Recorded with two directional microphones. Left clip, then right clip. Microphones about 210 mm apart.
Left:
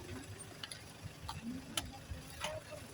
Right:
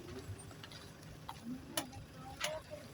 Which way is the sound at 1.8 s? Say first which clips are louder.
Even; 5° right (ahead or behind).